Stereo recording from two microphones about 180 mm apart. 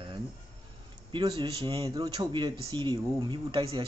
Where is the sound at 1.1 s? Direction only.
30° right (ahead or behind).